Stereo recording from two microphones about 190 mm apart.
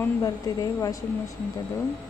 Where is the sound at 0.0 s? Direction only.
15° left (ahead or behind).